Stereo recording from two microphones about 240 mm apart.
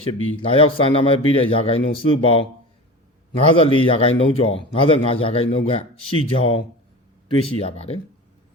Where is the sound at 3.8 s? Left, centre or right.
Left.